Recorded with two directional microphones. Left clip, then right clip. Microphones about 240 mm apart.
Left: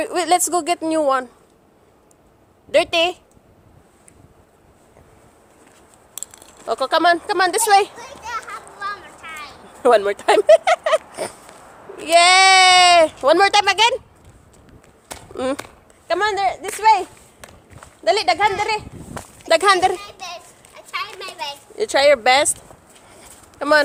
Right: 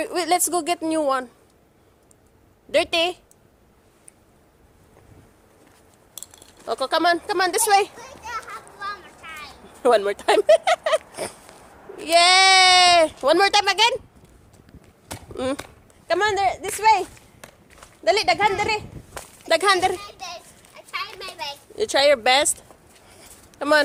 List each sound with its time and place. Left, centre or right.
0.0 s speech: centre
2.7 s speech: centre
6.1 s a sound: centre
11.9 s speech: centre
14.7 s a sound: centre
16.0 s walk: centre